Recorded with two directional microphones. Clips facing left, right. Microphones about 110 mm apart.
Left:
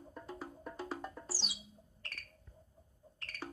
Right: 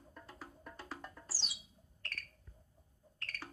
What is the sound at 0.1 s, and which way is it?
Music, 20° left (ahead or behind).